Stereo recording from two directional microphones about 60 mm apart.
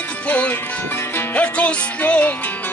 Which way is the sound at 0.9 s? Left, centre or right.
Left.